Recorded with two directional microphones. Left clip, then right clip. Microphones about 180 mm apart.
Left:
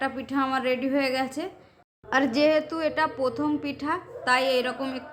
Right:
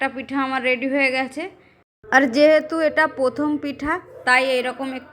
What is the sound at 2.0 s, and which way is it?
A woman's voice, 25° right (ahead or behind).